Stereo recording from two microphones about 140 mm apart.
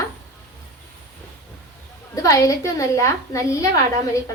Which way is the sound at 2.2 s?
20° left (ahead or behind).